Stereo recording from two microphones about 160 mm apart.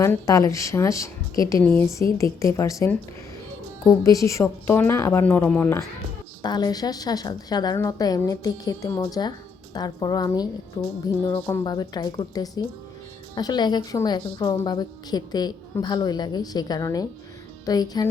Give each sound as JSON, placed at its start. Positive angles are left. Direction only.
{"t": 0.0, "sound": "a woman's voice", "side_deg": 20}
{"t": 4.0, "sound": "a woman's voice", "side_deg": 20}
{"t": 6.4, "sound": "a woman's voice", "side_deg": 25}